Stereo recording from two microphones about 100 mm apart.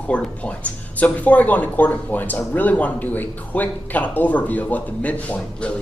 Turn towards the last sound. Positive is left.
turn(degrees=10)  # may be behind; listen again after turning